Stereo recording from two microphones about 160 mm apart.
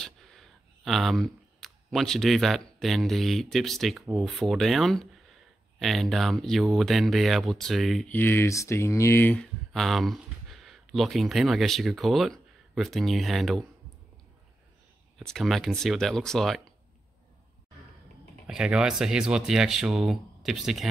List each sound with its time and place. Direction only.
0.0 s speech: centre (ahead or behind)
8.1 s speech: 15° left (ahead or behind)
15.1 s speech: centre (ahead or behind)
18.5 s speech: 5° right (ahead or behind)